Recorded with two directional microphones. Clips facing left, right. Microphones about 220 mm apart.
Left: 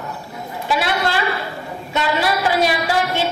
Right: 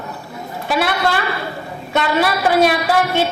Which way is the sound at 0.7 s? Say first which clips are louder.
Right 2 dB; 60° right (ahead or behind).